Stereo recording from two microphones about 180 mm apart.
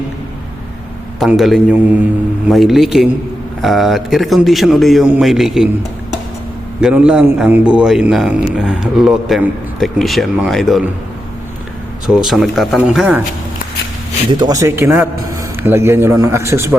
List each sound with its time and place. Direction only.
1.2 s a man's voice: centre (ahead or behind)
6.8 s a man's voice: 5° right (ahead or behind)
12.0 s a man's voice: 5° right (ahead or behind)
14.3 s a man's voice: 25° right (ahead or behind)